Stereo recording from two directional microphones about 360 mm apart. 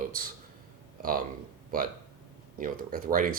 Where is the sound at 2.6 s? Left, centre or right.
Right.